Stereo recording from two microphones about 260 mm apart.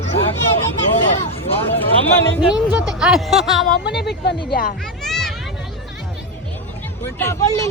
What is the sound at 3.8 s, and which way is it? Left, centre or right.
Speech, left.